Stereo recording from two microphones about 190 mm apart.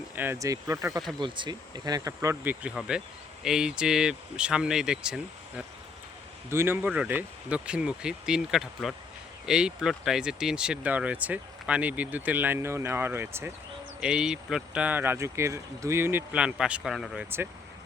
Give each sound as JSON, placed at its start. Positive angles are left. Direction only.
{"t": 0.2, "sound": "speech", "side_deg": -15}